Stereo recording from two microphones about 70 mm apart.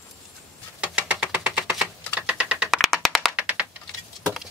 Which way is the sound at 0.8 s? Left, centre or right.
Centre.